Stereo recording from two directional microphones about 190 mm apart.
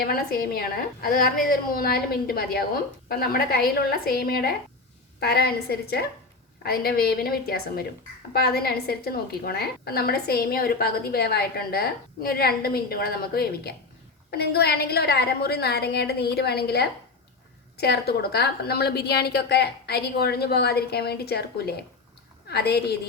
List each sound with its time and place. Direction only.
0.0 s a woman's voice: 50° left (ahead or behind)